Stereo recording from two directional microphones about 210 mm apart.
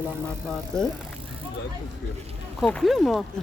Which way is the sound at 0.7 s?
5° left (ahead or behind).